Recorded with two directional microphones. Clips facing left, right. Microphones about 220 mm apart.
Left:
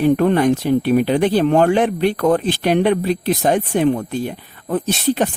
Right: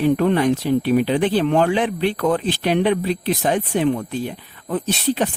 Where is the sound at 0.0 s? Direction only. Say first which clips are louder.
Left 2 dB; 50° left (ahead or behind).